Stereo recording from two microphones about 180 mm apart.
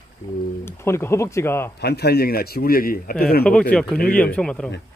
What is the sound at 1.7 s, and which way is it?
A man's voice, 65° left (ahead or behind).